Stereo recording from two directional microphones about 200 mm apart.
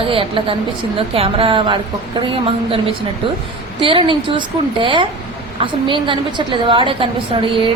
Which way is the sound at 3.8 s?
25° right (ahead or behind).